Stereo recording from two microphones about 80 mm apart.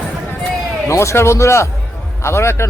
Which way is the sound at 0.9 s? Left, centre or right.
Left.